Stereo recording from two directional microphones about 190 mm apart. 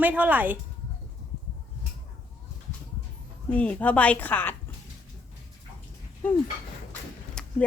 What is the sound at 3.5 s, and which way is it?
A woman's voice, 5° left (ahead or behind).